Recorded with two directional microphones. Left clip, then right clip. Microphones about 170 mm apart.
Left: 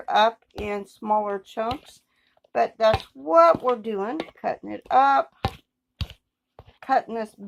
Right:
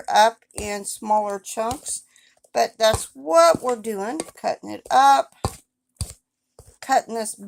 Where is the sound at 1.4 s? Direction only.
10° right (ahead or behind).